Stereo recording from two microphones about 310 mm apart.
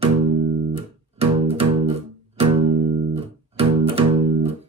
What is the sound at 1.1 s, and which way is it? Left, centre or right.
Music, centre.